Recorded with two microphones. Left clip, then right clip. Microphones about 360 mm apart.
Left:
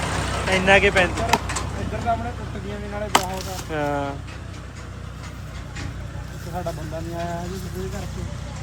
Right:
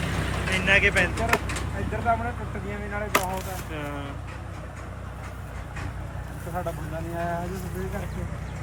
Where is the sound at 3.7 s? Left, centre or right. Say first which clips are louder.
Left 13 dB; centre.